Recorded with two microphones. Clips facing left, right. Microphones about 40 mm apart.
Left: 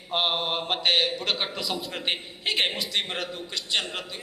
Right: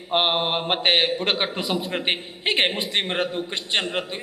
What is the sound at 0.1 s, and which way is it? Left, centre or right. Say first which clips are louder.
A man's voice: right 5 dB; right.